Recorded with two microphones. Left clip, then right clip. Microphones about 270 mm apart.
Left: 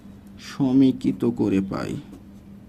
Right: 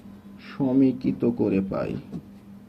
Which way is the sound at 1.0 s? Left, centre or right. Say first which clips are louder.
Left 1 dB; left.